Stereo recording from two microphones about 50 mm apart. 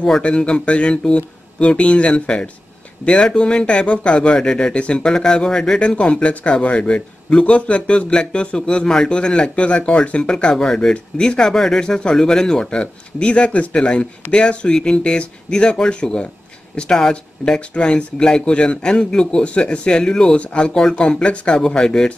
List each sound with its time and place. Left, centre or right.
0.2 s speech: left